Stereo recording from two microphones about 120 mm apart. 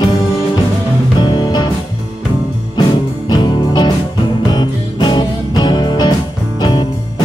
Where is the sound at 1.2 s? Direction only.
35° left (ahead or behind).